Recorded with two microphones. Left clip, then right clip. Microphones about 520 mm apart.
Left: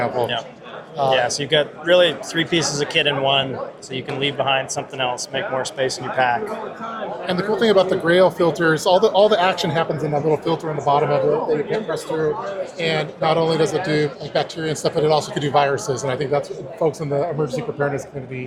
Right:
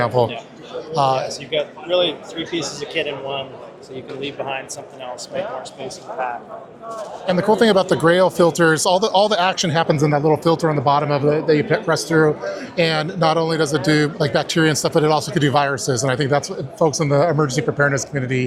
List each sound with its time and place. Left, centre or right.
0.9 s speech: right
1.3 s speech: left
7.3 s speech: right
7.6 s speech: right